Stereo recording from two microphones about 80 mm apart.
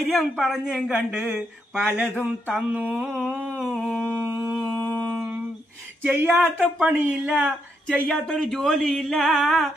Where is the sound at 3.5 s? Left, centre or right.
Centre.